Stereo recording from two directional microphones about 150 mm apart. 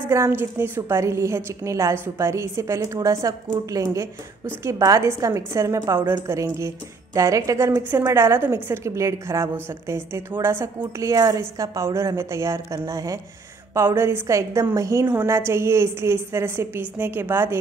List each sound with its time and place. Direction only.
0.1 s a woman's voice: 15° right (ahead or behind)